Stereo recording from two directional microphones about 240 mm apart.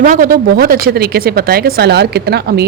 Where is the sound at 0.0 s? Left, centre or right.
Right.